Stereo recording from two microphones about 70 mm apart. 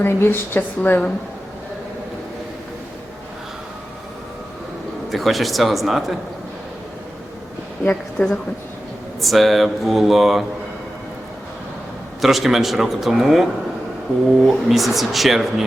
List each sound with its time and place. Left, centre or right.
0.0 s a woman's voice: left
5.1 s a man's voice: centre
8.2 s a woman's voice: left
9.2 s a man's voice: centre
12.2 s a man's voice: centre